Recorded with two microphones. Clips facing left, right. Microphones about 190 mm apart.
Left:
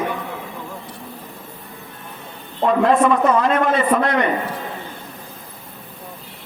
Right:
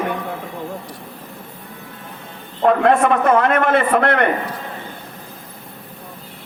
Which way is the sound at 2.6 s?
60° right (ahead or behind).